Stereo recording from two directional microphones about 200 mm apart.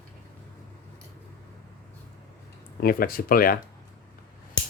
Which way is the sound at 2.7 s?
45° left (ahead or behind).